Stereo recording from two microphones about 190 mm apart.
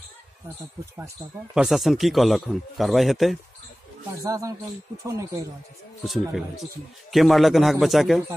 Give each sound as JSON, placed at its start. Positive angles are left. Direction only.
{"t": 0.9, "sound": "speech", "side_deg": -10}
{"t": 4.2, "sound": "speech", "side_deg": -15}
{"t": 6.0, "sound": "speech", "side_deg": 0}